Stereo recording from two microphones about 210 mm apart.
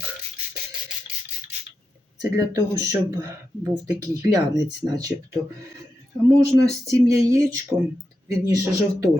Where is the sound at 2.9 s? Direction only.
15° right (ahead or behind).